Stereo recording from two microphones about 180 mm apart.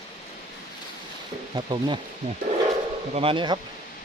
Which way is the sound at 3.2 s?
30° right (ahead or behind).